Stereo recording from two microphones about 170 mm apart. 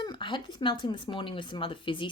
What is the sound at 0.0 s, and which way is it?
A woman's voice, 25° left (ahead or behind).